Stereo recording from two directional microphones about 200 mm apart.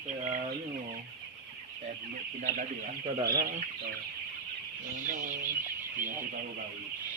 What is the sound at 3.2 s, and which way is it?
Speech, 50° right (ahead or behind).